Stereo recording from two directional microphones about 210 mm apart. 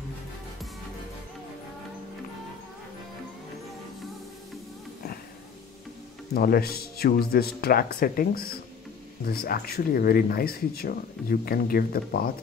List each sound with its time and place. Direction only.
6.3 s speech: 45° left (ahead or behind)